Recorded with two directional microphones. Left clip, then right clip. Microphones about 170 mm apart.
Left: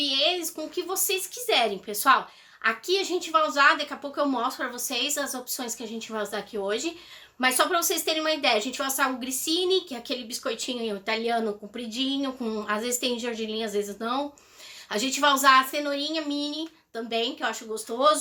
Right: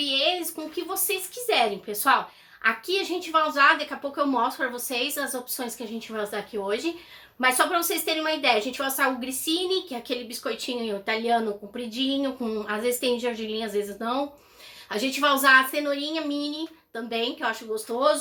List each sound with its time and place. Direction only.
0.0 s a woman's voice: 25° left (ahead or behind)